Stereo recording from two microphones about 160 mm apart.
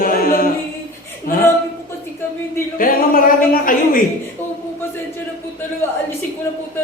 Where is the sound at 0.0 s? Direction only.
65° left (ahead or behind).